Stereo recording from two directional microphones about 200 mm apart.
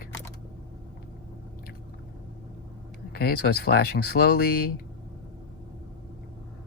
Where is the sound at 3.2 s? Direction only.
50° left (ahead or behind).